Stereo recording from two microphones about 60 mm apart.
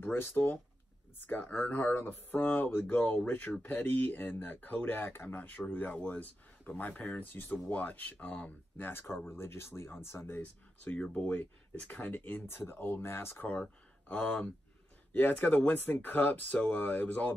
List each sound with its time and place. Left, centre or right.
0.0 s speech: left
10.4 s speech: left
11.0 s speech: centre; by 13.5 s left
13.5 s speech: left